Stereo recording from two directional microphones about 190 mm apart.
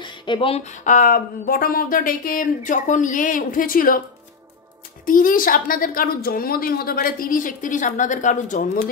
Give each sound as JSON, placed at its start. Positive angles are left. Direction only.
{"t": 0.0, "sound": "a sound", "side_deg": 25}
{"t": 0.8, "sound": "a woman's voice", "side_deg": 45}
{"t": 5.0, "sound": "a woman's voice", "side_deg": 45}